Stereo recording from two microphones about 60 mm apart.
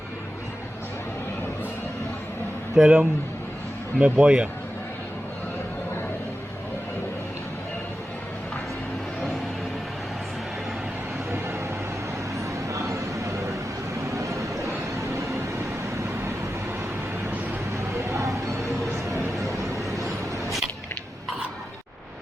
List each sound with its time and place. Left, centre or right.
2.7 s speech: centre
11.3 s vehicle: right
12.6 s a sound: right
14.1 s vehicle: right
17.9 s music: right